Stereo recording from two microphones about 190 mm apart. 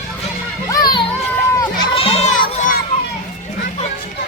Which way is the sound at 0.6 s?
20° left (ahead or behind).